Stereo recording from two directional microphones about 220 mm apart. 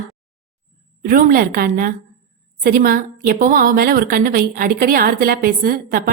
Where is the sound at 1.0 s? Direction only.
40° right (ahead or behind).